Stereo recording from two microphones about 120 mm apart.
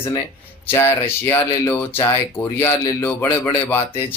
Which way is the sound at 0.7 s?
20° left (ahead or behind).